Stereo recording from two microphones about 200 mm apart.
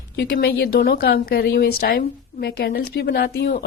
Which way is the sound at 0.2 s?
50° left (ahead or behind).